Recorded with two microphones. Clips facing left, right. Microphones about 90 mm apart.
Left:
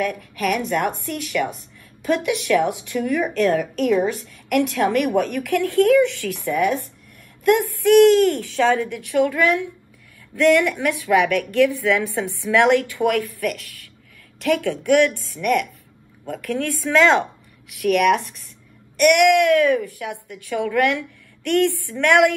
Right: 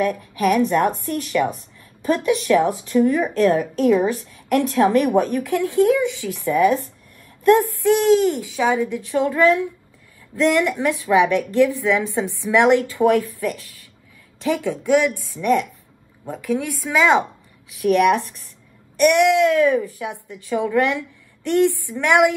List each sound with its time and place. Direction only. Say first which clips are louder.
0.0 s a woman's voice: right 3 dB; 20° right (ahead or behind)